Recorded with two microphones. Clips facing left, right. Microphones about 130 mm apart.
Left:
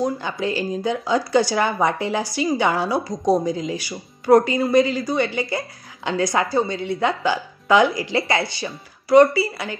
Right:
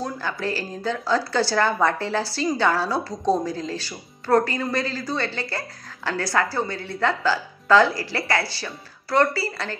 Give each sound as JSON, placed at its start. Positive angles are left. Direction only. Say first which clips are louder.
{"t": 0.0, "sound": "speech", "louder": "left 5 dB", "side_deg": 20}